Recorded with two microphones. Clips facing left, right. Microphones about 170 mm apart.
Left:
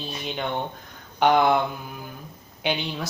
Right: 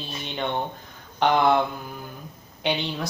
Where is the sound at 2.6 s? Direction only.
Centre (ahead or behind).